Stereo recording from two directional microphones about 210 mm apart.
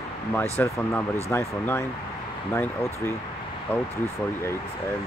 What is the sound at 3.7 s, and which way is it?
Speech, 10° left (ahead or behind).